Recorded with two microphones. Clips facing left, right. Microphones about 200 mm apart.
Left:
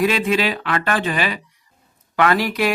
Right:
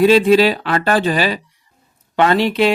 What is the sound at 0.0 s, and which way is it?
Speech, 30° right (ahead or behind).